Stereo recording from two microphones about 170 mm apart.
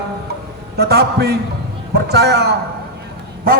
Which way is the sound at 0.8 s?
70° right (ahead or behind).